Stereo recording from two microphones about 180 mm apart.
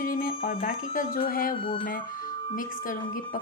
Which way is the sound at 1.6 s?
30° left (ahead or behind).